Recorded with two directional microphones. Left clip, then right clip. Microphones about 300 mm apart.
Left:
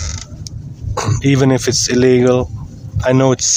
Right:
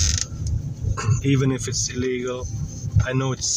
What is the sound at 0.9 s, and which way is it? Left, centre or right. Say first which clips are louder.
Speech: left 9 dB; left.